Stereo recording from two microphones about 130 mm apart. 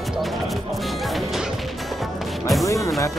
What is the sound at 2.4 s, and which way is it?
Music, centre (ahead or behind).